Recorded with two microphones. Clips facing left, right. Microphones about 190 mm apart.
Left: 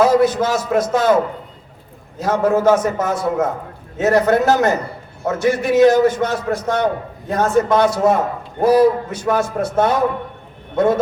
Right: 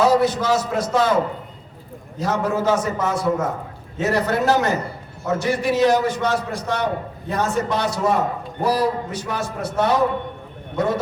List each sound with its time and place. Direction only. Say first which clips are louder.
0.0 s a man's voice: left 3 dB; 50° left (ahead or behind)